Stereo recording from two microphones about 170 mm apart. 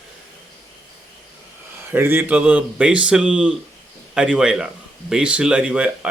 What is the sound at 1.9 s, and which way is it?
A man's voice, 10° right (ahead or behind).